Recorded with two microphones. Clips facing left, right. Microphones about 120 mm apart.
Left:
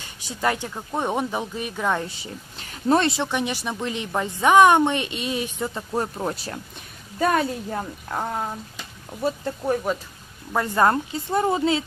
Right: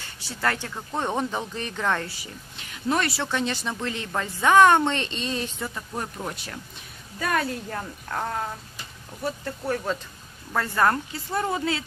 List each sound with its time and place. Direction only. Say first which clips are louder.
0.0 s speech: left 3 dB; 15° left (ahead or behind)
2.6 s a sound: left 5 dB; 35° left (ahead or behind)
3.1 s speech: left 2 dB; 15° left (ahead or behind)
5.8 s a woman's voice: left 9 dB; 35° left (ahead or behind)
7.7 s speech: left 3 dB; 10° left (ahead or behind)